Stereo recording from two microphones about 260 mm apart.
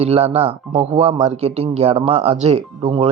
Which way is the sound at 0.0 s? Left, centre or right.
Right.